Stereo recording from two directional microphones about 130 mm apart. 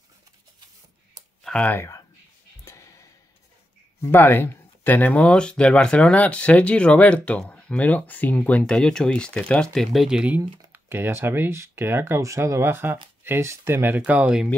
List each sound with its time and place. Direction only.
1.4 s speech: 10° left (ahead or behind)
2.6 s a sound: 25° left (ahead or behind)
4.0 s speech: 15° left (ahead or behind); by 14.5 s 5° right (ahead or behind)